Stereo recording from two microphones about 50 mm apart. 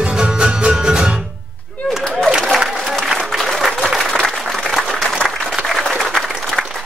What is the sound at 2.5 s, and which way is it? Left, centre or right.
Applause, centre.